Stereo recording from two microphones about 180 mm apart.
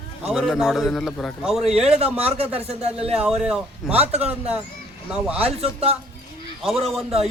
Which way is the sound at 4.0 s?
35° right (ahead or behind).